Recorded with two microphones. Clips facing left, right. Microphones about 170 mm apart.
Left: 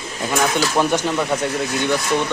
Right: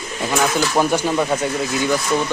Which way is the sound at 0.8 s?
10° right (ahead or behind).